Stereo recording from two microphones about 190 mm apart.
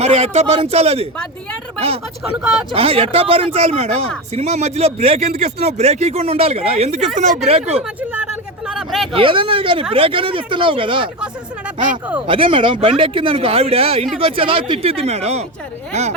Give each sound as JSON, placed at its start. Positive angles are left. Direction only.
{"t": 0.0, "sound": "speech", "side_deg": -35}
{"t": 2.3, "sound": "speech", "side_deg": 0}
{"t": 2.7, "sound": "a man's voice", "side_deg": -30}
{"t": 8.6, "sound": "vehicle", "side_deg": 0}
{"t": 9.1, "sound": "speech", "side_deg": -25}
{"t": 12.2, "sound": "a man's voice", "side_deg": -30}